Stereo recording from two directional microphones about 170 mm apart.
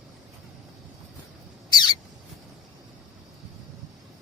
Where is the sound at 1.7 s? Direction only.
25° left (ahead or behind).